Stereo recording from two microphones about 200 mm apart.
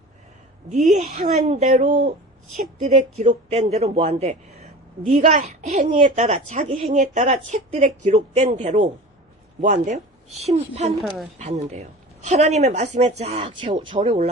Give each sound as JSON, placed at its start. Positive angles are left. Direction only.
{"t": 0.7, "sound": "a woman's voice", "side_deg": -35}
{"t": 10.9, "sound": "a woman's voice", "side_deg": 0}
{"t": 11.3, "sound": "a woman's voice", "side_deg": -35}